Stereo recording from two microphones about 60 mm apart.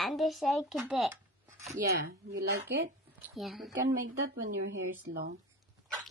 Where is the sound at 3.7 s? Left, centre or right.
Right.